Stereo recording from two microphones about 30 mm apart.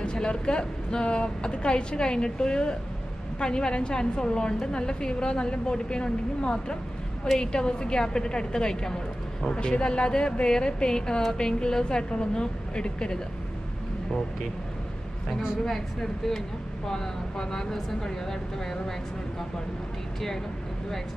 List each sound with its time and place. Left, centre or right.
0.0 s a woman's voice: left
15.6 s speech: centre